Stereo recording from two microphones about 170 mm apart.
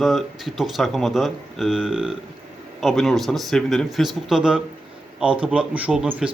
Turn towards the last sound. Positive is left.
turn(degrees=-5)  # may be behind; listen again after turning